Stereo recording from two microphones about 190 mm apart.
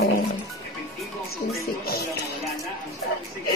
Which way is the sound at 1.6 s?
55° left (ahead or behind).